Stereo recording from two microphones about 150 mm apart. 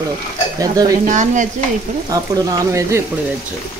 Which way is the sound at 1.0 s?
55° right (ahead or behind).